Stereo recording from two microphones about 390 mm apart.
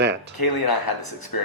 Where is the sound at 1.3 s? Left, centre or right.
Left.